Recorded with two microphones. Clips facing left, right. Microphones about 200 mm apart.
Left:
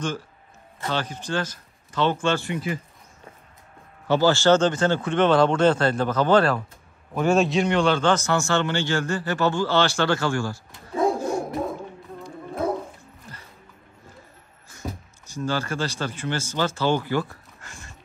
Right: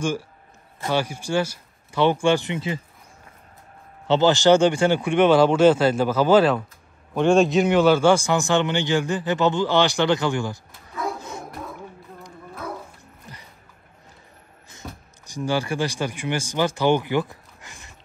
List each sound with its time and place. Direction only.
0.8 s a man's voice: 10° right (ahead or behind)
4.1 s a man's voice: 20° right (ahead or behind)
15.2 s speech: 15° right (ahead or behind)